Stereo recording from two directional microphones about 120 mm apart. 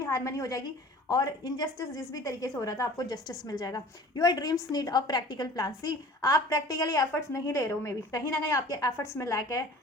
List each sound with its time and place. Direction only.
0.0 s a woman's voice: 25° left (ahead or behind)